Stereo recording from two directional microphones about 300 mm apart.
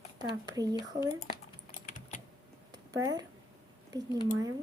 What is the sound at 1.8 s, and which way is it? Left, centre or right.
Typing, left.